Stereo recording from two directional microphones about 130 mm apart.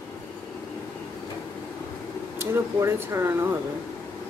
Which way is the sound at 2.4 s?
20° right (ahead or behind).